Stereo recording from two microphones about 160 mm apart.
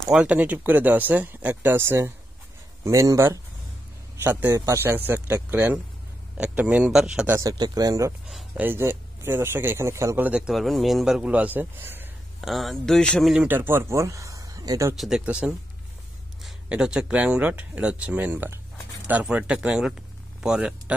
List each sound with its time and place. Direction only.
0.1 s speech: 10° right (ahead or behind)
7.3 s speech: 25° right (ahead or behind)
8.3 s a sound: centre (ahead or behind)
8.6 s speech: 15° right (ahead or behind)
12.4 s speech: centre (ahead or behind)
13.5 s speech: 15° right (ahead or behind)
15.0 s speech: 5° right (ahead or behind)